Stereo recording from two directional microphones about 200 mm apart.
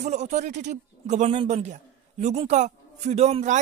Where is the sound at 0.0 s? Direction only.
35° right (ahead or behind).